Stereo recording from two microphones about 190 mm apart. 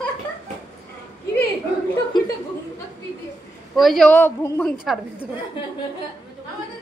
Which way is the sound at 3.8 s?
Centre (ahead or behind).